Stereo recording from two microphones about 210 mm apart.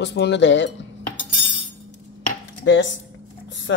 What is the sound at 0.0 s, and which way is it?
Speech, 55° left (ahead or behind).